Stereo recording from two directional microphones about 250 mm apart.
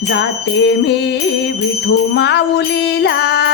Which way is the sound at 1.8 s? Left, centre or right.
Left.